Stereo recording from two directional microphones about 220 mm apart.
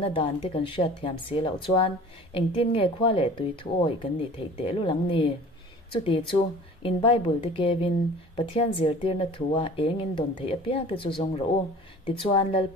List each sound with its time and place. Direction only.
0.0 s speech: 25° left (ahead or behind)